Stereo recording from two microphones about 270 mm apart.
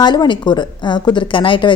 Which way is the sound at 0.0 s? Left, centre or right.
Centre.